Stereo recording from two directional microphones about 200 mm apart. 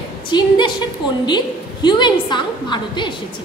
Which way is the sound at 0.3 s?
20° left (ahead or behind).